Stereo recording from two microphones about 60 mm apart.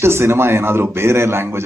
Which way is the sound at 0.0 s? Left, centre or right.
Right.